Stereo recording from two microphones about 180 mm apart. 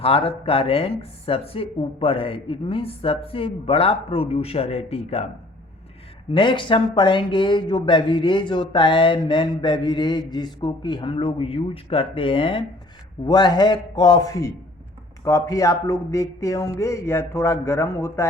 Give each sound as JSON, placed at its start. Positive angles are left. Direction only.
{"t": 0.0, "sound": "speech", "side_deg": 30}
{"t": 6.3, "sound": "speech", "side_deg": 25}